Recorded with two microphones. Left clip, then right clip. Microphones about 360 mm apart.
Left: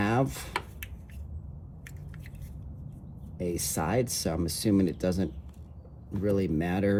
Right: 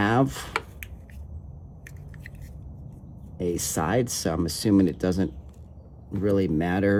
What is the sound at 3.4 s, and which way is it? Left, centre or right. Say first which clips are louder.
Speech: right 4 dB; centre.